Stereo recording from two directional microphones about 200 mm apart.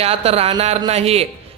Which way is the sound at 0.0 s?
30° right (ahead or behind).